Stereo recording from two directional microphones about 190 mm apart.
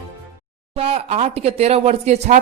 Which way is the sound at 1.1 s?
35° right (ahead or behind).